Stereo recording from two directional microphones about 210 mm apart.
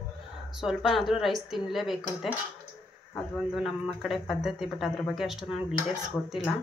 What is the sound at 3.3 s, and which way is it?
Speech, centre (ahead or behind).